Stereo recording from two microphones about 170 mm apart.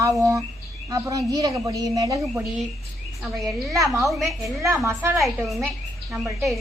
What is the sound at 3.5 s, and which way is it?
A woman's voice, 20° right (ahead or behind).